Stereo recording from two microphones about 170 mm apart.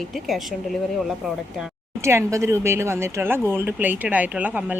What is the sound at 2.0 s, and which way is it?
Speech, 15° right (ahead or behind).